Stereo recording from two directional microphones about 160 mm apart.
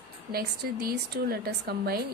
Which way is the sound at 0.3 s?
70° right (ahead or behind).